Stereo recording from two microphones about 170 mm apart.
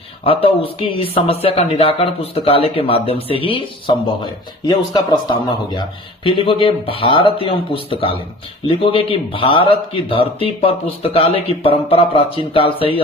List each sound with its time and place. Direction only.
0.3 s speech: 35° left (ahead or behind)